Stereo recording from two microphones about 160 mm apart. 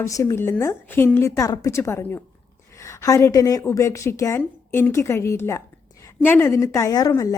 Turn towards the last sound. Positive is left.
turn(degrees=20)  # may be behind; listen again after turning